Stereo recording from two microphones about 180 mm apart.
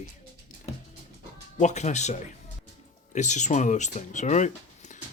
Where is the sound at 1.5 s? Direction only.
40° left (ahead or behind).